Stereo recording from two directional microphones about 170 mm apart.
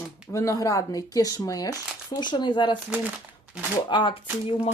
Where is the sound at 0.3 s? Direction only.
20° left (ahead or behind).